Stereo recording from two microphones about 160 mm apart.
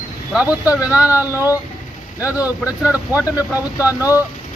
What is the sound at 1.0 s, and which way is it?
Speech, 20° left (ahead or behind).